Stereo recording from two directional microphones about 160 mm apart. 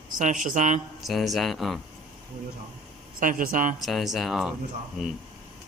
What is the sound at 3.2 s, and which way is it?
Speech, 60° right (ahead or behind).